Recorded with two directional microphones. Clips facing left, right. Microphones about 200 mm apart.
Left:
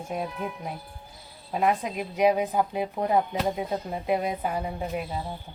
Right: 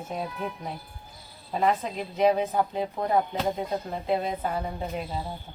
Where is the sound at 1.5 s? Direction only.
10° left (ahead or behind).